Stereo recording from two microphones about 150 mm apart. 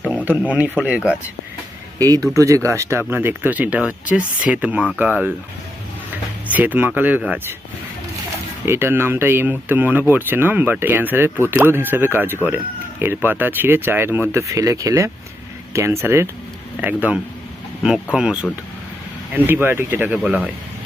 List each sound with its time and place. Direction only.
0.1 s speech: 10° right (ahead or behind)
2.0 s speech: 25° right (ahead or behind)
6.5 s speech: 10° right (ahead or behind)
8.6 s speech: 15° right (ahead or behind)
19.5 s speech: 15° right (ahead or behind)